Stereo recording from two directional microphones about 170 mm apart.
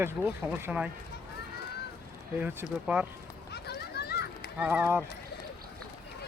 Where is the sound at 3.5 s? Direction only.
70° left (ahead or behind).